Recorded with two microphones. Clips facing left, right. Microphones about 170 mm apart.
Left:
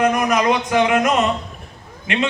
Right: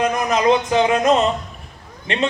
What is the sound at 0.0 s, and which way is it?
A man's voice, 20° right (ahead or behind).